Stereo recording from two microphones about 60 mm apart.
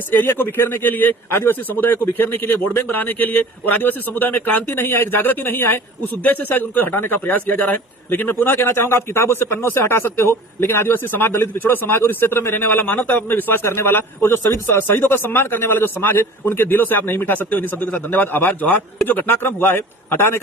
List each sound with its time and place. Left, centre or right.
0.1 s a man's voice: left